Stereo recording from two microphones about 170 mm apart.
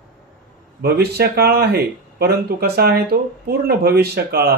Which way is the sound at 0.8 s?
70° right (ahead or behind).